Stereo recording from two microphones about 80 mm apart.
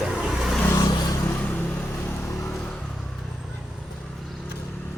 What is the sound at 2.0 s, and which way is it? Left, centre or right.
Vehicle, left.